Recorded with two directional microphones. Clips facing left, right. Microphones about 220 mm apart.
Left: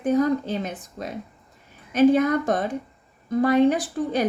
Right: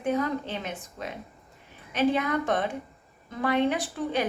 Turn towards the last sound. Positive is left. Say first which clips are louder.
# left 4 dB
turn(degrees=40)  # may be behind; listen again after turning